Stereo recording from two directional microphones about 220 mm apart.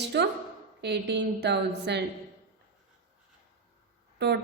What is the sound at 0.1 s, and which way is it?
A woman's voice, 50° right (ahead or behind).